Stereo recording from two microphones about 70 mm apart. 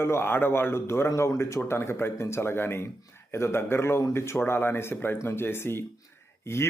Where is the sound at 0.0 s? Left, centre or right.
Left.